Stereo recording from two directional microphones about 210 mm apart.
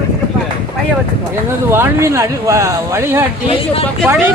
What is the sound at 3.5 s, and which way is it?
Speech, 25° left (ahead or behind).